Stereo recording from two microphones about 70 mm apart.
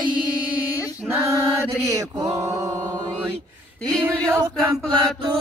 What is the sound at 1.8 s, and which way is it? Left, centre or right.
Mantra, right.